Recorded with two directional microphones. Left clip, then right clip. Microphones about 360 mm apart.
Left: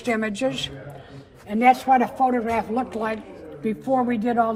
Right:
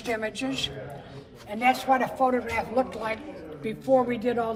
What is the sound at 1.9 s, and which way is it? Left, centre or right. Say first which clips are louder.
Speech: left 5 dB; left.